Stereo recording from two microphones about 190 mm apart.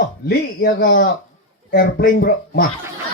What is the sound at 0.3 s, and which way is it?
Speech, 55° left (ahead or behind).